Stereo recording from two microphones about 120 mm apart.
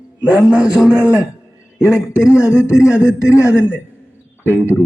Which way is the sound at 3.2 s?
25° left (ahead or behind).